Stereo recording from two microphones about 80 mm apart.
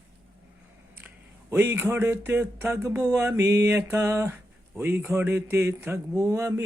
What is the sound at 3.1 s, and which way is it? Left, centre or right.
A man's voice, right.